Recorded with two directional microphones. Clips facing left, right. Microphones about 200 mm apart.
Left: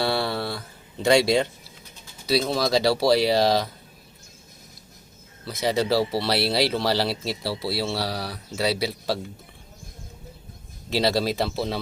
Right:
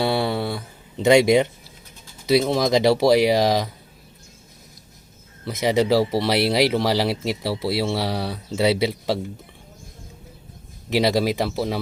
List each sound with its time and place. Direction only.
0.0 s a sound: 15° right (ahead or behind)
2.2 s speech: 20° right (ahead or behind)
5.5 s speech: 20° right (ahead or behind)
10.8 s speech: 15° right (ahead or behind)